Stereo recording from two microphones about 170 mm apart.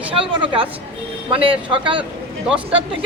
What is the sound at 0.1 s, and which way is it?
A woman's voice, 30° right (ahead or behind).